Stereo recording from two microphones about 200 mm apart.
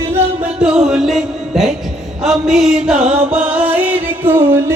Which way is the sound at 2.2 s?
Centre (ahead or behind).